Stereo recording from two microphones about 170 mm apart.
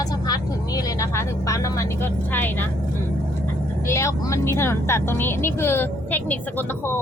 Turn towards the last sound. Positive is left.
turn(degrees=10)  # may be behind; listen again after turning